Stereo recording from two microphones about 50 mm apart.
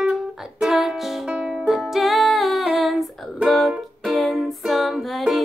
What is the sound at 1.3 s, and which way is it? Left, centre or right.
Music, right.